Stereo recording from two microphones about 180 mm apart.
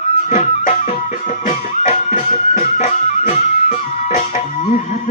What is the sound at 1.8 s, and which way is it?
Music, 45° left (ahead or behind).